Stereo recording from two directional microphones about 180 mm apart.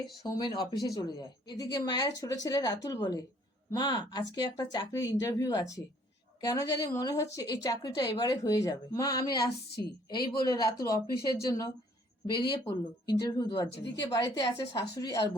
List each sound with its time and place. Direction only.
0.2 s a woman's voice: 25° left (ahead or behind)
13.7 s speech: 75° left (ahead or behind)
14.0 s a woman's voice: 25° left (ahead or behind)